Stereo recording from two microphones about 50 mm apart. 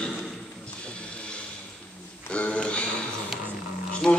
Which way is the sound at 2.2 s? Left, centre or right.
Left.